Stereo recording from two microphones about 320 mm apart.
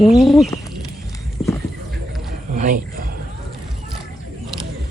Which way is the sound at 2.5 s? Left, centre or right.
Right.